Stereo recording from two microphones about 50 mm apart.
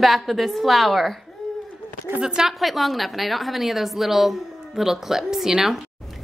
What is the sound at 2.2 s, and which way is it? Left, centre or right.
A woman's voice, centre.